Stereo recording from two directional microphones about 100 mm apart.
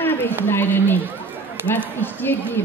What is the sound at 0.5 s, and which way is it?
Speech, 20° left (ahead or behind).